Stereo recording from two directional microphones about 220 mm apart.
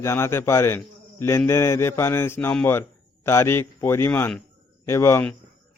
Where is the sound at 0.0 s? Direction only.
10° left (ahead or behind).